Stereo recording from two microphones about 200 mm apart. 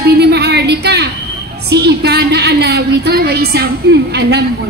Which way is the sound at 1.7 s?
55° right (ahead or behind).